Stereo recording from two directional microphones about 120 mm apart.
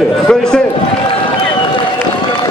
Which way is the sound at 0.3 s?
5° left (ahead or behind).